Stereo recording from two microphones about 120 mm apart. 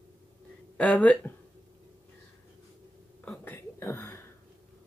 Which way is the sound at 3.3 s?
15° left (ahead or behind).